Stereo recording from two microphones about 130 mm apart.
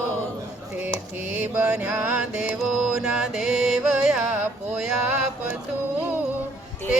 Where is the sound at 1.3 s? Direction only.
10° right (ahead or behind).